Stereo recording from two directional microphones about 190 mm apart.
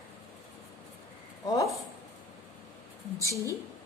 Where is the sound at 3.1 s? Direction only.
15° left (ahead or behind).